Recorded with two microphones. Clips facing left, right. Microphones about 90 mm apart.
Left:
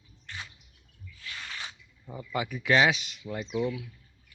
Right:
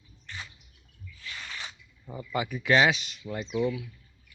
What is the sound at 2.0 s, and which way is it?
Speech, centre (ahead or behind).